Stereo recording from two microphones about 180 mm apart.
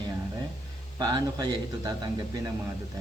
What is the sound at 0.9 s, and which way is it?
Speech, 25° right (ahead or behind).